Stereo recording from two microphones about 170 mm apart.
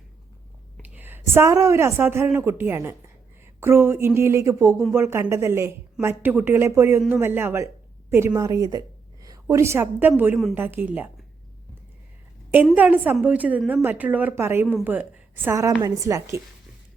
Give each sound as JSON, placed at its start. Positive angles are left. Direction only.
{"t": 0.8, "sound": "a woman's voice", "side_deg": -10}
{"t": 10.3, "sound": "a woman's voice", "side_deg": 0}
{"t": 10.6, "sound": "a woman's voice", "side_deg": -10}
{"t": 12.7, "sound": "a woman's voice", "side_deg": -10}